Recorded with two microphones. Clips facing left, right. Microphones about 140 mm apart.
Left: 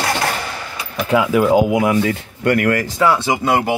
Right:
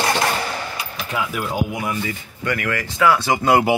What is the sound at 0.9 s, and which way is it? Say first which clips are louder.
Speech: left 12 dB; 90° left.